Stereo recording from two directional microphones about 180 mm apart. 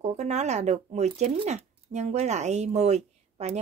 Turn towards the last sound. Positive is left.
turn(degrees=-35)  # may be behind; listen again after turning